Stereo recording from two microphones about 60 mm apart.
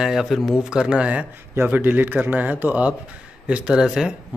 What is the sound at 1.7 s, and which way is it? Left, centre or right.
Speech, right.